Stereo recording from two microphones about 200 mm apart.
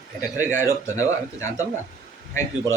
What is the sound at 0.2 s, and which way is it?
A man's voice, 15° left (ahead or behind).